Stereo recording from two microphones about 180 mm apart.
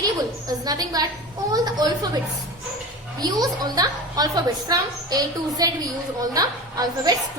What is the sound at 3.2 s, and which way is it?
A woman's voice, 20° right (ahead or behind).